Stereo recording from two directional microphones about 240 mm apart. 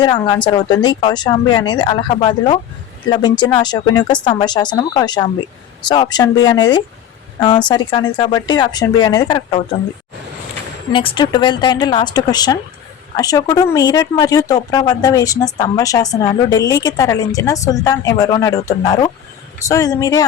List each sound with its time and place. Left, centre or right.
0.0 s a woman's voice: centre
10.9 s a woman's voice: left